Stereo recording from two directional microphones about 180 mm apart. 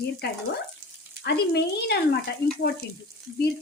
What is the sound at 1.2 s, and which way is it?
Speech, 65° left (ahead or behind).